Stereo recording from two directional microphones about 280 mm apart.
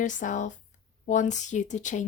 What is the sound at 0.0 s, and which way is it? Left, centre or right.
A woman's voice, left.